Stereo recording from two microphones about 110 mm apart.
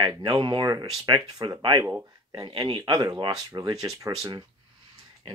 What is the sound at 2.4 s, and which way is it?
Speech, 45° right (ahead or behind).